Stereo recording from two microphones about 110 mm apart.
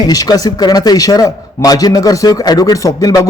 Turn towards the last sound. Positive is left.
turn(degrees=35)  # may be behind; listen again after turning